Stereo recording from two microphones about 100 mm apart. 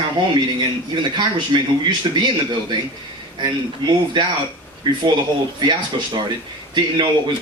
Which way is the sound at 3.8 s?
50° right (ahead or behind).